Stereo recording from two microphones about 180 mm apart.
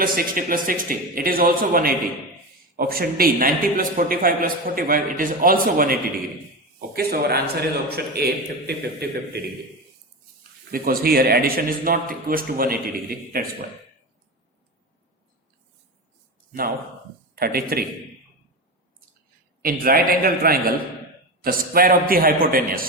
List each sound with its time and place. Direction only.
0.0 s a man's voice: 55° right (ahead or behind)
10.7 s a man's voice: 55° right (ahead or behind)
16.5 s a man's voice: 55° right (ahead or behind)
19.6 s a man's voice: 55° right (ahead or behind)